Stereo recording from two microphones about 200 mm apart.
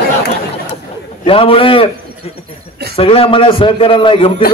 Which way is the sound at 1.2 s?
30° left (ahead or behind).